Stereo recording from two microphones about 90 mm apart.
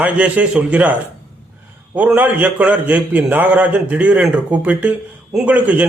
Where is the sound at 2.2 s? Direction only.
20° right (ahead or behind).